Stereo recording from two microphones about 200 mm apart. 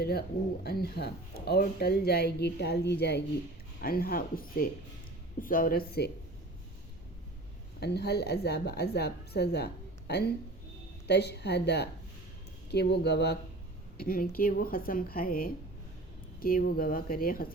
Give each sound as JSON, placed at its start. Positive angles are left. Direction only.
{"t": 0.0, "sound": "speech", "side_deg": 50}
{"t": 7.8, "sound": "a woman's voice", "side_deg": 55}